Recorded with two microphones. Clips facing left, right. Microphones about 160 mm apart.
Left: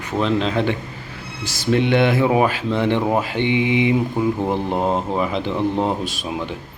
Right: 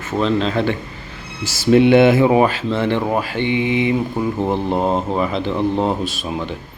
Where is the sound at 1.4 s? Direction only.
5° right (ahead or behind).